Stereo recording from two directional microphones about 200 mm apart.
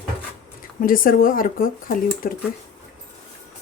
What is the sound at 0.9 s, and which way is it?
Speech, 45° left (ahead or behind).